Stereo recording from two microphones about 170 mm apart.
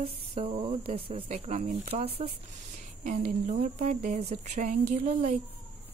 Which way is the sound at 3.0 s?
45° right (ahead or behind).